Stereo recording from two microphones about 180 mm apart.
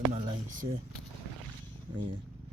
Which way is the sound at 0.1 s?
30° right (ahead or behind).